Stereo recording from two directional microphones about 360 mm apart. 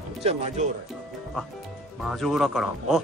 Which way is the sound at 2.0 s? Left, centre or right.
Centre.